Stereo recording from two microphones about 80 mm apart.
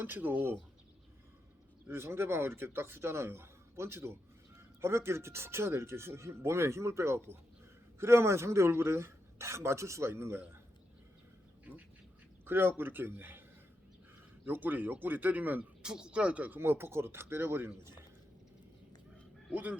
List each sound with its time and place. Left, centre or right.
0.0 s speech: right
1.9 s speech: right
11.7 s duck: right
12.5 s speech: right
14.4 s speech: right
15.8 s speech: centre; by 17.9 s right
19.5 s speech: right